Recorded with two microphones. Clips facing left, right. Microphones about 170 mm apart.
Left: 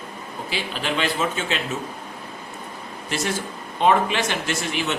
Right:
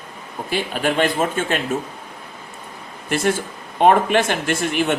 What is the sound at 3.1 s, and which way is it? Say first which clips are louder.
A man's voice: right 6 dB; 50° right (ahead or behind).